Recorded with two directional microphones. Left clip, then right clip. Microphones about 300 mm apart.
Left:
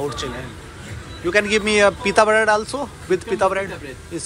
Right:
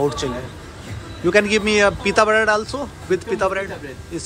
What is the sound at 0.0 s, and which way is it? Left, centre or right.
A man's voice, centre.